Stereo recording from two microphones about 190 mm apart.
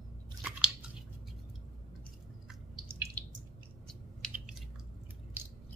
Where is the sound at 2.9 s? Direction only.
10° right (ahead or behind).